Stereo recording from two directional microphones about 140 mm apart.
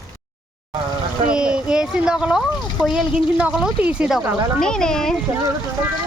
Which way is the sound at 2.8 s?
5° right (ahead or behind).